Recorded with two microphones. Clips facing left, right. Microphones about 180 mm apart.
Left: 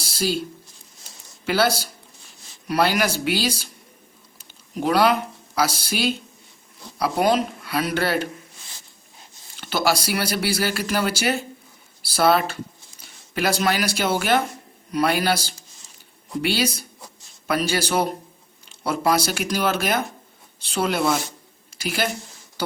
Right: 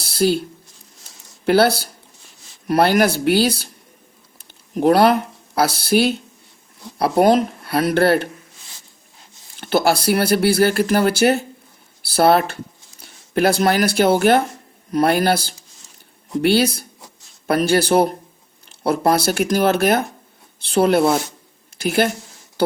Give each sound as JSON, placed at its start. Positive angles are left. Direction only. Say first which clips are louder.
{"t": 0.0, "sound": "a sound", "louder": "right 7 dB", "side_deg": -60}
{"t": 1.5, "sound": "speech", "louder": "right 6 dB", "side_deg": -55}
{"t": 4.7, "sound": "speech", "louder": "right 5 dB", "side_deg": -50}
{"t": 9.6, "sound": "a woman's voice", "louder": "right 5 dB", "side_deg": -55}